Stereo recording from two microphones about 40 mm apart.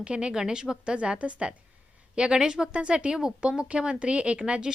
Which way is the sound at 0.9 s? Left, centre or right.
Right.